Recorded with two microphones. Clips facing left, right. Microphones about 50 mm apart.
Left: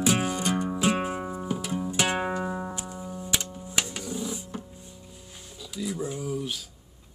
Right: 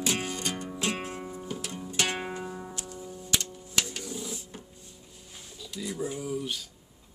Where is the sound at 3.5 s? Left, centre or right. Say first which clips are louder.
Left 5 dB; left.